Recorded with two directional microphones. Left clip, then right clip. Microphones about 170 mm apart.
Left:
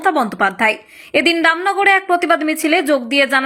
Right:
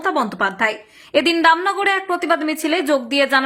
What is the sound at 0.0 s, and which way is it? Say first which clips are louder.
Speech: left 4 dB; 15° left (ahead or behind).